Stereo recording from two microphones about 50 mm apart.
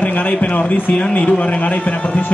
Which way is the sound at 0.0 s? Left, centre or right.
Left.